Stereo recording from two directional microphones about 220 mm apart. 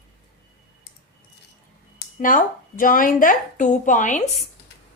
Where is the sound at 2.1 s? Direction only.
40° left (ahead or behind).